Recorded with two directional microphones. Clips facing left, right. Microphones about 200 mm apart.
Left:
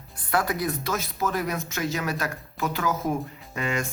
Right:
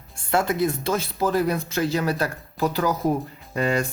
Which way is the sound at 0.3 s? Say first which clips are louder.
Right 4 dB; 25° right (ahead or behind).